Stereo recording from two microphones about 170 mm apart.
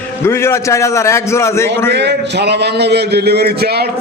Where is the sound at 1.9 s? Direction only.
80° right.